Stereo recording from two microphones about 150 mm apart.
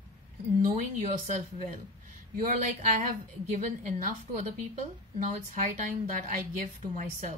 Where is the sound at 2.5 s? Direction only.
55° right (ahead or behind).